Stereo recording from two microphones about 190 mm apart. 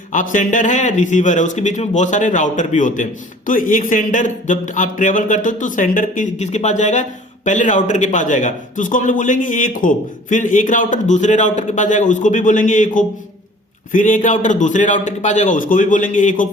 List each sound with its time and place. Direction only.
0.1 s speech: 45° left (ahead or behind)